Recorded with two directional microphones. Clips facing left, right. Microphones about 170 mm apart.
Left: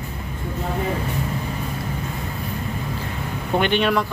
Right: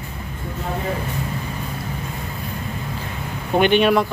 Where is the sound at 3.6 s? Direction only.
15° right (ahead or behind).